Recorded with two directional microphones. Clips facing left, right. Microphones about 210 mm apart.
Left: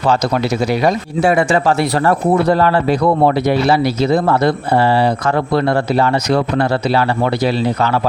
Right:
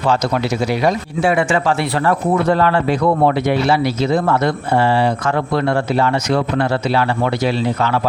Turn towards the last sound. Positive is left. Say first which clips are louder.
# left 2 dB
turn(degrees=35)  # may be behind; listen again after turning